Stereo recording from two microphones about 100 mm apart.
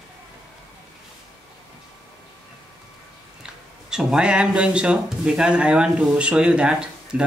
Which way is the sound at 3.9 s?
5° right (ahead or behind).